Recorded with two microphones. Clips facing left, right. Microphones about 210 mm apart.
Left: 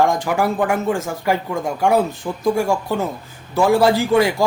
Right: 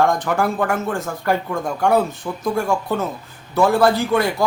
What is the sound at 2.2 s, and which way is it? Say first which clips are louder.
Speech: left 1 dB; 15° left (ahead or behind).